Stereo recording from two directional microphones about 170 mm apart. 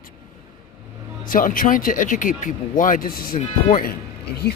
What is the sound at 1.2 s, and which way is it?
Speech, 55° left (ahead or behind).